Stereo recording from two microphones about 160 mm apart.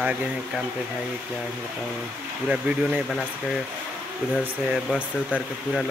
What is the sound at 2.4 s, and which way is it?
Speech, 5° right (ahead or behind).